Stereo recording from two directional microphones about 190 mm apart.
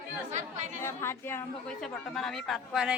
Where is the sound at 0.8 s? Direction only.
15° left (ahead or behind).